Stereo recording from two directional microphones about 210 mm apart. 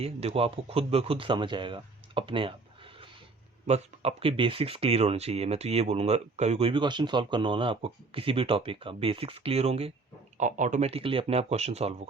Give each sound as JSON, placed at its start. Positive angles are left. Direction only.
{"t": 0.0, "sound": "speech", "side_deg": -30}
{"t": 3.7, "sound": "speech", "side_deg": -30}